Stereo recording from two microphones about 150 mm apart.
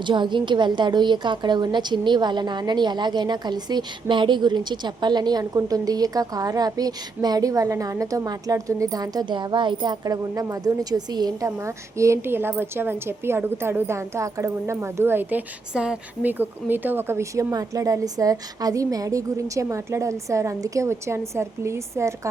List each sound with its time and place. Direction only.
0.0 s a woman's voice: 30° right (ahead or behind)